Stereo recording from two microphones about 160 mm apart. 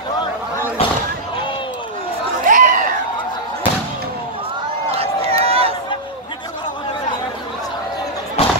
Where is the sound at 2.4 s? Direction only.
55° right (ahead or behind).